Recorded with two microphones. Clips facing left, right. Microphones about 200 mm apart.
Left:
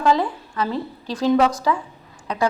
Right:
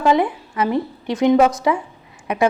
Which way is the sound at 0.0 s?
20° right (ahead or behind).